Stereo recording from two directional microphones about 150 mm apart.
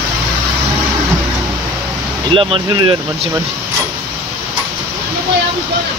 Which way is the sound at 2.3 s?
35° right (ahead or behind).